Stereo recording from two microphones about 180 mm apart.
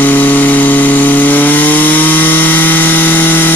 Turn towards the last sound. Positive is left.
turn(degrees=10)  # may be behind; listen again after turning